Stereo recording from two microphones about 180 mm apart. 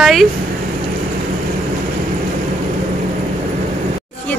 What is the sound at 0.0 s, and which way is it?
Speech, centre (ahead or behind).